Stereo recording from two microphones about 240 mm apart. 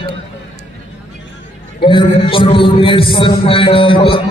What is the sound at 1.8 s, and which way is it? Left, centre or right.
A man's voice, centre.